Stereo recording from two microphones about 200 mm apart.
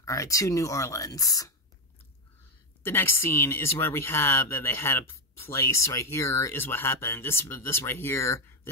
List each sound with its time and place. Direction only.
0.0 s speech: 15° left (ahead or behind)
2.8 s speech: 10° left (ahead or behind)